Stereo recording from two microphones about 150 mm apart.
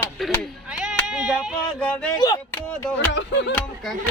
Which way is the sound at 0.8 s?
5° right (ahead or behind).